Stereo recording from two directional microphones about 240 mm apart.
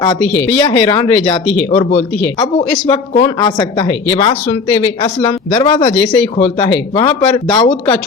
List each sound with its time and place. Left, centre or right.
0.4 s speech: centre